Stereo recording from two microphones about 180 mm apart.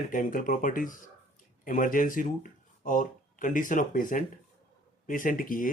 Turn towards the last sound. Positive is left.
turn(degrees=50)  # may be behind; listen again after turning